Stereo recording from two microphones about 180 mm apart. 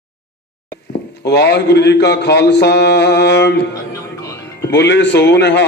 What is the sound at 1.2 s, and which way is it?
Speech, 65° left (ahead or behind).